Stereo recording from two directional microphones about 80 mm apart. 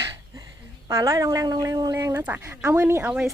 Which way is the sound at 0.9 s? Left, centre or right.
Right.